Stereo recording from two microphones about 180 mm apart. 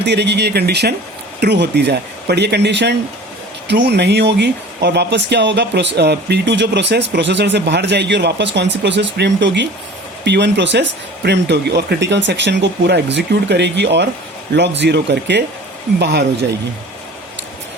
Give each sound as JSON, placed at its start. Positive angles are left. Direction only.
{"t": 0.0, "sound": "speech", "side_deg": -70}